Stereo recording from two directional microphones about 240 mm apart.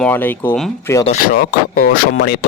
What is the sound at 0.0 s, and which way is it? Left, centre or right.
Speech, centre.